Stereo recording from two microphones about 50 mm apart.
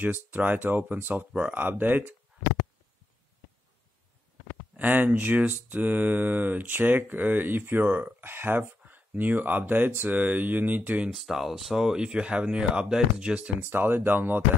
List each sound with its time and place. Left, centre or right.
0.0 s speech: right
4.7 s speech: right
10.8 s speech: right
11.1 s speech: centre; by 13.5 s right
13.6 s speech: right